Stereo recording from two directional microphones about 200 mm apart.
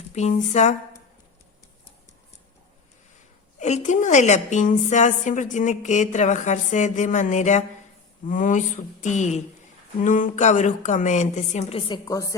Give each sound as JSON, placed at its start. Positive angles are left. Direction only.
{"t": 0.1, "sound": "a woman's voice", "side_deg": 35}
{"t": 3.6, "sound": "a woman's voice", "side_deg": 35}
{"t": 11.9, "sound": "a woman's voice", "side_deg": 20}